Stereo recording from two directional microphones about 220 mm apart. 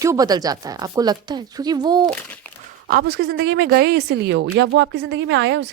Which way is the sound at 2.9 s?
45° right (ahead or behind).